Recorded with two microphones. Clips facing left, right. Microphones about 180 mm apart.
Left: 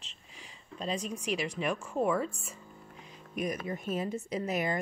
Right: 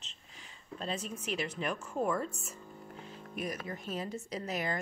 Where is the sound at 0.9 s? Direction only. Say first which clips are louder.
Left 4 dB; 5° right (ahead or behind).